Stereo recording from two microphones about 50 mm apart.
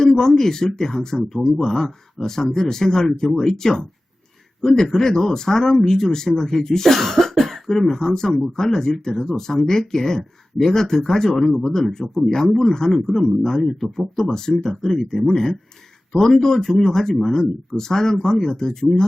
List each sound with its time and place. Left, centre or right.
0.0 s speech: centre